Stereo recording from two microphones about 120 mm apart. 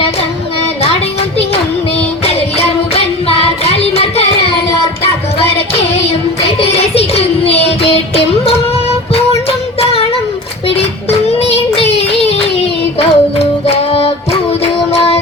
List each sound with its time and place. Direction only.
2.2 s music: 55° left (ahead or behind)
6.6 s music: 55° left (ahead or behind)
11.3 s child singing: 60° left (ahead or behind)
13.0 s music: 55° left (ahead or behind)
14.6 s child singing: 55° left (ahead or behind)